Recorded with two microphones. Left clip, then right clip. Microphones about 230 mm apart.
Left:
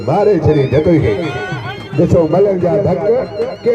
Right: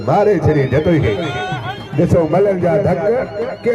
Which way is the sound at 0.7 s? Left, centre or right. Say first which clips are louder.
Left 3 dB; right.